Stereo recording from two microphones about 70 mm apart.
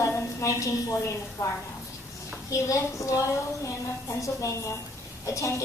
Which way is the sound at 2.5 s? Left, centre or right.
Left.